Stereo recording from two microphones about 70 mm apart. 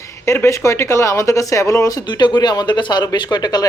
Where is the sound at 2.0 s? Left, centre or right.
Left.